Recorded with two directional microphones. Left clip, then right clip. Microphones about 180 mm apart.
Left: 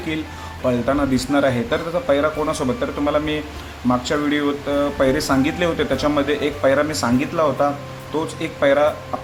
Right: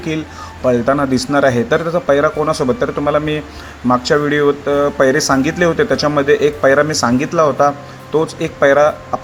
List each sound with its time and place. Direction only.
0.6 s speech: 35° right (ahead or behind)